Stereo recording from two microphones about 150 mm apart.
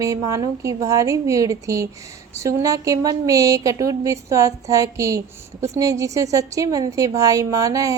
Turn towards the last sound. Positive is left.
turn(degrees=-25)  # may be behind; listen again after turning